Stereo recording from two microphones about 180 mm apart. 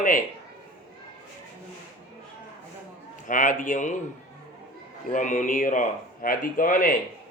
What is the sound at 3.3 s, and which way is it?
Speech, 45° left (ahead or behind).